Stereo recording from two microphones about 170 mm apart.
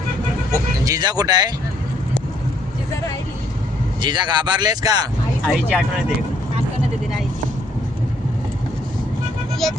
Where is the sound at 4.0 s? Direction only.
25° right (ahead or behind).